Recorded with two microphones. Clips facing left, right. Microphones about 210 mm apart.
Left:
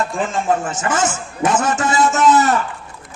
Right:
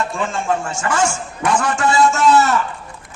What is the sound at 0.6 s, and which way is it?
A man's voice, 20° left (ahead or behind).